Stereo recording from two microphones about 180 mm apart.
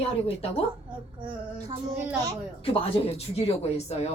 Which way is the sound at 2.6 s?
30° left (ahead or behind).